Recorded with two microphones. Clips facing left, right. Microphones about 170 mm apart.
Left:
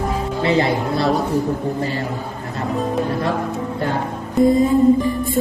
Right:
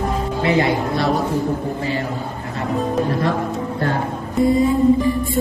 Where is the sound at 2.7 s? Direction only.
Centre (ahead or behind).